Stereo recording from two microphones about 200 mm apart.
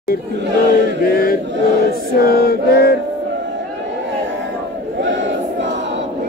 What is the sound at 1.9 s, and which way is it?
Music, 50° left (ahead or behind).